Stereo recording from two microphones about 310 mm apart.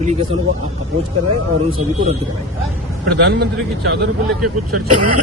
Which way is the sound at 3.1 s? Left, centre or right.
Right.